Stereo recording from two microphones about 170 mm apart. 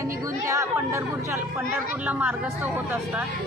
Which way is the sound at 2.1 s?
10° right (ahead or behind).